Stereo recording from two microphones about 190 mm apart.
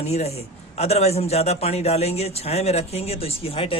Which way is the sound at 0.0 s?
35° left (ahead or behind).